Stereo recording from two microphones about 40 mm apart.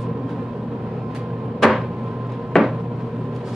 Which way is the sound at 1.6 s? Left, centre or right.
Centre.